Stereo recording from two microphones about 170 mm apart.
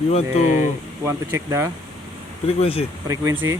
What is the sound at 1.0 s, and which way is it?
Speech, 15° right (ahead or behind).